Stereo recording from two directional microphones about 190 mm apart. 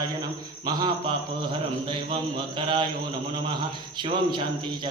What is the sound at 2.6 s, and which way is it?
Mantra, 25° right (ahead or behind).